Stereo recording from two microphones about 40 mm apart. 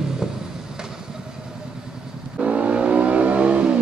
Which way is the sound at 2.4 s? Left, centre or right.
Right.